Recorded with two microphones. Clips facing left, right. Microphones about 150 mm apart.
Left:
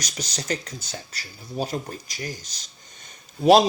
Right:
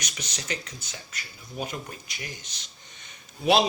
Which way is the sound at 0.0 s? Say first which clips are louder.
Left 5 dB; 35° left (ahead or behind).